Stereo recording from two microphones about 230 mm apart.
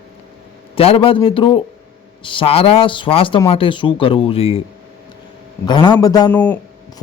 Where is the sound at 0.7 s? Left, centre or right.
Left.